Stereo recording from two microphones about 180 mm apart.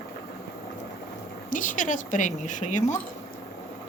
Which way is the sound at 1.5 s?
45° left (ahead or behind).